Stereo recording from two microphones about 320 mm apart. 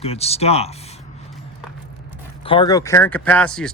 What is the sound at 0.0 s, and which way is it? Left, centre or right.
Speech, centre.